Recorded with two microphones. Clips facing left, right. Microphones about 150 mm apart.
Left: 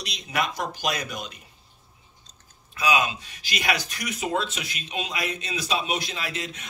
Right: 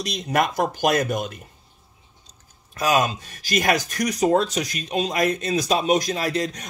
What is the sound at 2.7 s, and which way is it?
Speech, 45° right (ahead or behind).